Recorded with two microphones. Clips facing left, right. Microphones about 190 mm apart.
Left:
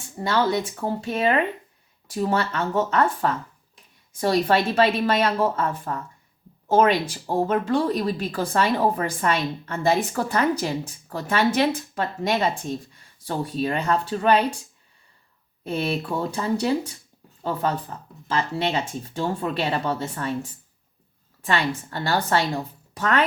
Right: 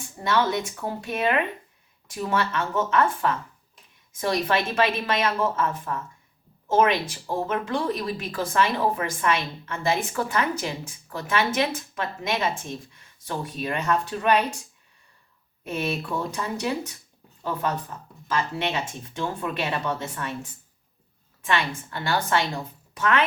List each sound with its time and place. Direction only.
0.2 s speech: 30° left (ahead or behind)
15.6 s speech: 30° left (ahead or behind)
21.4 s speech: 35° left (ahead or behind)